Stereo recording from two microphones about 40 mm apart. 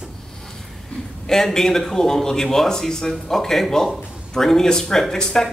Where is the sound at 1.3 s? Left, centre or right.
Centre.